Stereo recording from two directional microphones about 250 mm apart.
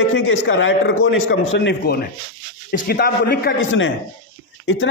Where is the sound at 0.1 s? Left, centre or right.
Left.